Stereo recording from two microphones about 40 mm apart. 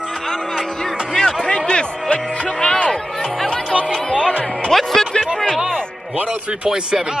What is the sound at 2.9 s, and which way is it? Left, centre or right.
Speech, centre.